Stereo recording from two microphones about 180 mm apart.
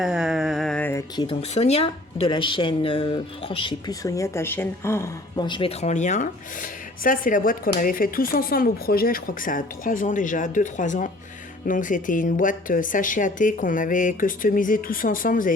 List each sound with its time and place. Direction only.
0.0 s a sound: centre (ahead or behind)
1.1 s speech: 25° left (ahead or behind)
5.4 s speech: 25° left (ahead or behind); by 15.5 s 50° left (ahead or behind)